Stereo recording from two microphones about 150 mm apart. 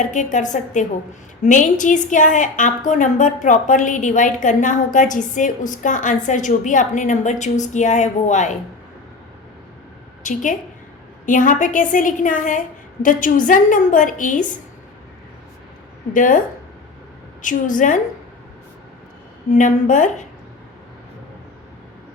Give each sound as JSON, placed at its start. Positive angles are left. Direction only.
{"t": 0.0, "sound": "a woman's voice", "side_deg": 55}
{"t": 10.3, "sound": "a woman's voice", "side_deg": 55}
{"t": 16.1, "sound": "a woman's voice", "side_deg": 65}
{"t": 17.4, "sound": "a woman's voice", "side_deg": 60}
{"t": 19.5, "sound": "a woman's voice", "side_deg": 60}